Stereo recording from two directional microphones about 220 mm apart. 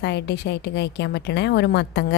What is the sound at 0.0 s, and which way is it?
A woman's voice, 50° left (ahead or behind).